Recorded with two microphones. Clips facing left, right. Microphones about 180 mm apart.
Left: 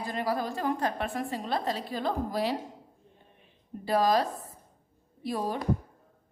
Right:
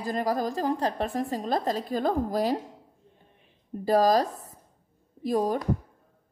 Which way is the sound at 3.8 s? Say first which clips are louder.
Right 4 dB; 40° right (ahead or behind).